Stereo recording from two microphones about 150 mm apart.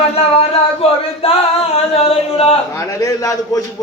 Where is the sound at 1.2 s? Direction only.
40° left (ahead or behind).